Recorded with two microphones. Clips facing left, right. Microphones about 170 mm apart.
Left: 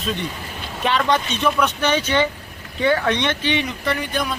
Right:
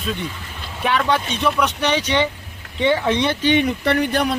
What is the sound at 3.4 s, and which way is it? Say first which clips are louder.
Speech: right 5 dB; 50° right (ahead or behind).